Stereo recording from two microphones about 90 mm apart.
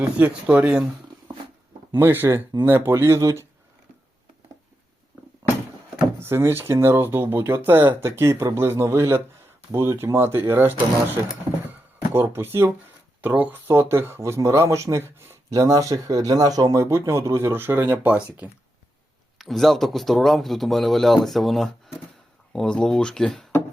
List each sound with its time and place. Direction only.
0.2 s speech: 15° right (ahead or behind)
1.9 s speech: 25° right (ahead or behind)
5.4 s a sound: 25° right (ahead or behind)
6.1 s speech: 30° right (ahead or behind)
15.5 s speech: 40° right (ahead or behind); by 18.4 s 15° right (ahead or behind)
19.4 s speech: centre (ahead or behind)